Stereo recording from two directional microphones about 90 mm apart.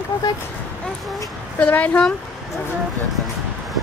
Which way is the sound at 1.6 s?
15° left (ahead or behind).